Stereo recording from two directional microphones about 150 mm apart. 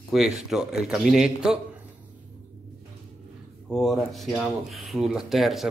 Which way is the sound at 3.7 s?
Centre (ahead or behind).